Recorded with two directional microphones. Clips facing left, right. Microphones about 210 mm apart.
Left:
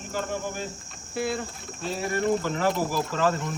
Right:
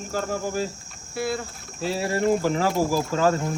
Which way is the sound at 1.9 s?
90° right.